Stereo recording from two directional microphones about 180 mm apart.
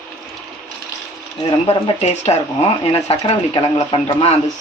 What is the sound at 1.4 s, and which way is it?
Speech, 30° left (ahead or behind).